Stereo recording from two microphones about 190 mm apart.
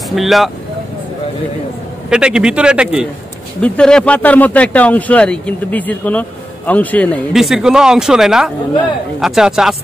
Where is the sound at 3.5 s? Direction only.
5° left (ahead or behind).